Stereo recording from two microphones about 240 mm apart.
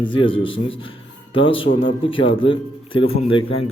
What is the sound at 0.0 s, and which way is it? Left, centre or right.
A man's voice, left.